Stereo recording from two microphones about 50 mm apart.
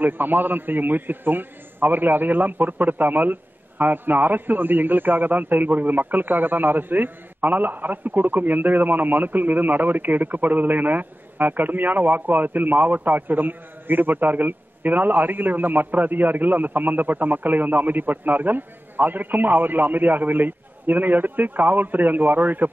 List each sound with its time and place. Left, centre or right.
0.0 s a man's voice: right